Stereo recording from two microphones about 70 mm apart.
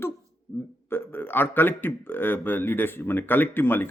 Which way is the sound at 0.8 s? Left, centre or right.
Left.